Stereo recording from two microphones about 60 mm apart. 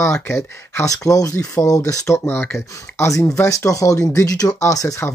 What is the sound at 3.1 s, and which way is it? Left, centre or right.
Speech, left.